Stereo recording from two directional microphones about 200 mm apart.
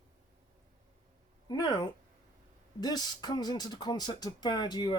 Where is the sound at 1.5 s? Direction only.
20° left (ahead or behind).